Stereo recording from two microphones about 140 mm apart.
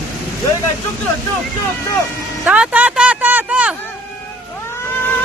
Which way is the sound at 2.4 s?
5° right (ahead or behind).